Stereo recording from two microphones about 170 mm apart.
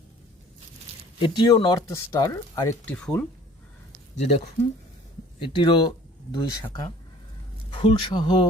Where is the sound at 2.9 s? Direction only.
5° left (ahead or behind).